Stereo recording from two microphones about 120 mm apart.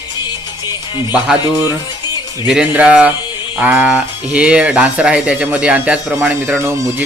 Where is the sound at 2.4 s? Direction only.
10° right (ahead or behind).